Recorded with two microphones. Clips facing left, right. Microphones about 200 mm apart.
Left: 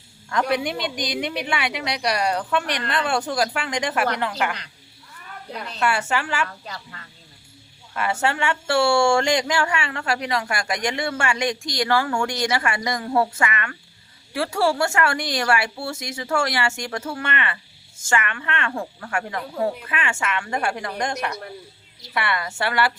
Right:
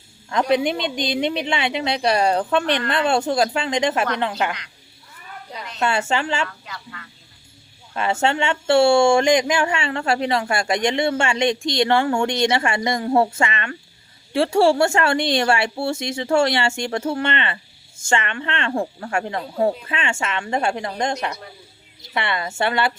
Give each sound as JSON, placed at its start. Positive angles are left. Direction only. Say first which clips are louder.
{"t": 0.3, "sound": "speech", "louder": "right 4 dB", "side_deg": -20}
{"t": 5.8, "sound": "speech", "louder": "right 2 dB", "side_deg": -25}
{"t": 6.7, "sound": "a sound", "louder": "even", "side_deg": 35}
{"t": 7.9, "sound": "speech", "louder": "right 3 dB", "side_deg": -25}